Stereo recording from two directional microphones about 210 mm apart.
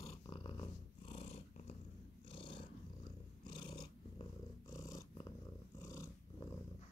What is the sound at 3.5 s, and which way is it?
Purr, 20° left (ahead or behind).